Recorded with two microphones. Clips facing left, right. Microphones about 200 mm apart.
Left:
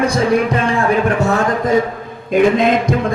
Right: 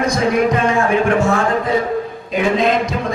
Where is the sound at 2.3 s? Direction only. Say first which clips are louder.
Left 4 dB; 50° left (ahead or behind).